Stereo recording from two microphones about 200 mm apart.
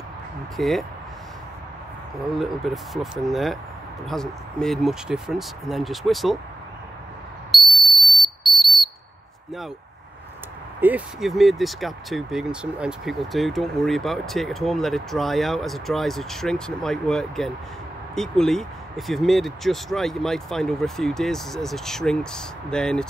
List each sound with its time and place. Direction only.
0.6 s speech: centre (ahead or behind)
2.3 s speech: centre (ahead or behind)
7.5 s whistle: centre (ahead or behind)
10.8 s speech: 5° right (ahead or behind)